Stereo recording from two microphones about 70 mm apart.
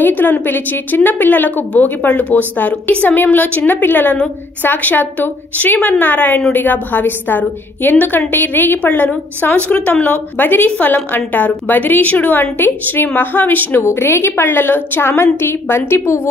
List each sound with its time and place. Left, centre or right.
0.0 s a woman's voice: left